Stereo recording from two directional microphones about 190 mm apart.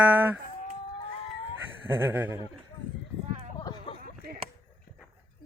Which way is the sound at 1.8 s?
15° right (ahead or behind).